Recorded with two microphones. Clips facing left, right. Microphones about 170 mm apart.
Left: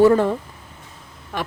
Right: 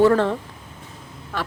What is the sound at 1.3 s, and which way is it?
Speech, 15° left (ahead or behind).